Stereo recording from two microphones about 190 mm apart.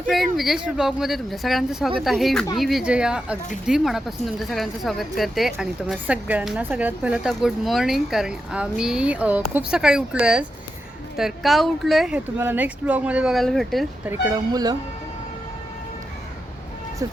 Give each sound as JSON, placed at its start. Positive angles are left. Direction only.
{"t": 0.1, "sound": "speech", "side_deg": 0}
{"t": 14.1, "sound": "speech", "side_deg": -15}